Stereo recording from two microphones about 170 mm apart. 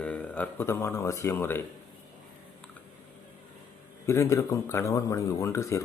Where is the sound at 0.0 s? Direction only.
5° left (ahead or behind).